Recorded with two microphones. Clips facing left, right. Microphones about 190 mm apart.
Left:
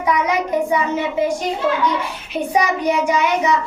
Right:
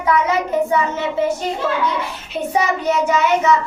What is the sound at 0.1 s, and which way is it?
Speech, 15° left (ahead or behind).